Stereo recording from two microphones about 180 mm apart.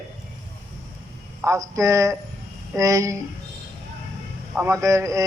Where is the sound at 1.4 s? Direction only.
20° right (ahead or behind).